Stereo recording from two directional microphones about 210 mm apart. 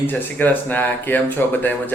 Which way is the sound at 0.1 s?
10° left (ahead or behind).